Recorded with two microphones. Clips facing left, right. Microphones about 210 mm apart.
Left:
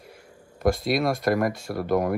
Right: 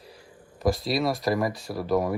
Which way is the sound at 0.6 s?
Centre (ahead or behind).